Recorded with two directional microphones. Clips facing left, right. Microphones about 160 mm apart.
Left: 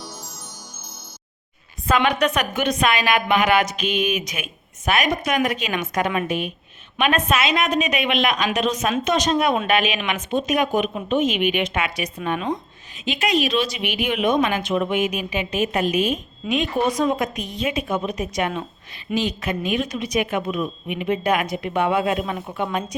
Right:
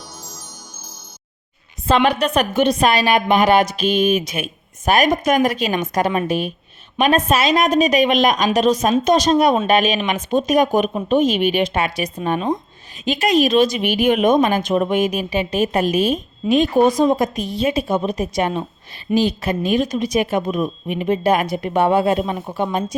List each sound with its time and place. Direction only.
1.9 s a woman's voice: 30° right (ahead or behind)
4.9 s a woman's voice: 40° right (ahead or behind)
13.1 s a woman's voice: 40° right (ahead or behind)